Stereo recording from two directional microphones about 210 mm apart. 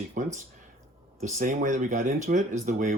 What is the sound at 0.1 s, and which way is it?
Speech, 35° right (ahead or behind).